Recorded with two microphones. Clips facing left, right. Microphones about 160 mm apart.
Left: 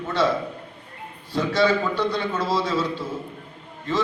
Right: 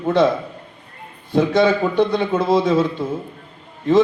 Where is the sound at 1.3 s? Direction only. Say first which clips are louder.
Right 5 dB; 55° right (ahead or behind).